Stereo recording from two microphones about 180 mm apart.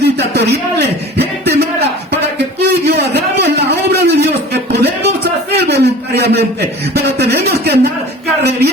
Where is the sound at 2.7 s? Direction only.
60° right (ahead or behind).